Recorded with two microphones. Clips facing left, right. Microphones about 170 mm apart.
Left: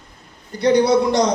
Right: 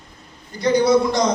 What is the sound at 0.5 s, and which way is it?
Speech, 65° left (ahead or behind).